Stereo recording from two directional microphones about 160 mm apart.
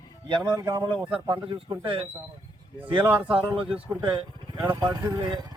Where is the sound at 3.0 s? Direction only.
10° right (ahead or behind).